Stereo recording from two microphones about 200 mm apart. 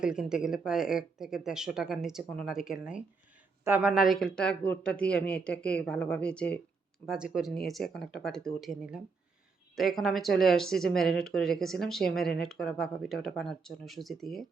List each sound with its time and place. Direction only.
0.0 s speech: 5° right (ahead or behind)